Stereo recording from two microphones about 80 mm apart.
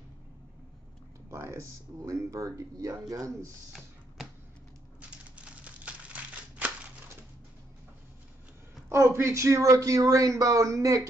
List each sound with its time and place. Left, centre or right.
1.3 s speech: right
5.4 s crumpling: centre
8.8 s speech: right